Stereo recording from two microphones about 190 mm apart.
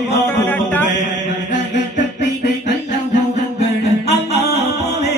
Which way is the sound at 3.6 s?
35° left (ahead or behind).